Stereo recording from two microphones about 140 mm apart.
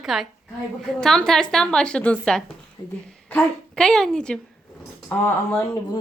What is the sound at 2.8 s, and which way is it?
Speech, 25° left (ahead or behind).